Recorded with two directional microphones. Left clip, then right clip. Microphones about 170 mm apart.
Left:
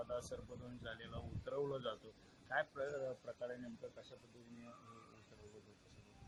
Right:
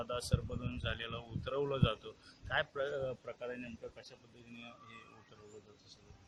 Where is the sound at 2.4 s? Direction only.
20° right (ahead or behind).